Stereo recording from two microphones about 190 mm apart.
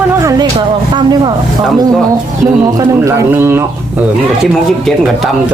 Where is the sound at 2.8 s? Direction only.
15° right (ahead or behind).